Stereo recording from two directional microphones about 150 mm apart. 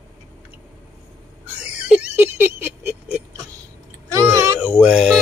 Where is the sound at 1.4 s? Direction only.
10° right (ahead or behind).